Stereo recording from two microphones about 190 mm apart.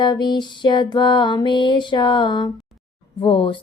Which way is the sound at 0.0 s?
25° left (ahead or behind).